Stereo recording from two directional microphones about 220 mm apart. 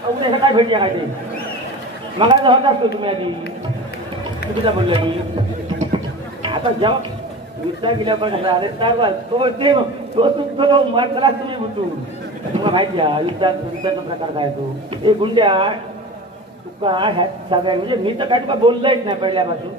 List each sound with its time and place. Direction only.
0.2 s a man's voice: 20° right (ahead or behind)
2.1 s a man's voice: 20° right (ahead or behind)
4.6 s a man's voice: 25° right (ahead or behind)
6.4 s a man's voice: 20° right (ahead or behind)
12.5 s a man's voice: 20° right (ahead or behind)
16.8 s a man's voice: 20° right (ahead or behind)